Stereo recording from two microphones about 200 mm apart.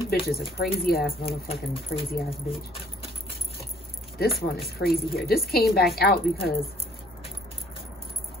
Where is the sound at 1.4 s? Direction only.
25° left (ahead or behind).